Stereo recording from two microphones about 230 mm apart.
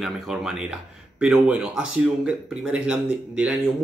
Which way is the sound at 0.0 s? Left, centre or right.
Centre.